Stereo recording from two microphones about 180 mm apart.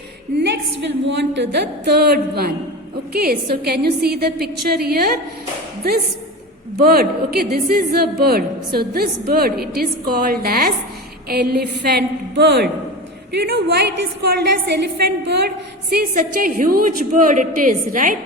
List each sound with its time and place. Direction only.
0.4 s a woman's voice: 70° right (ahead or behind)
6.7 s a woman's voice: 55° right (ahead or behind)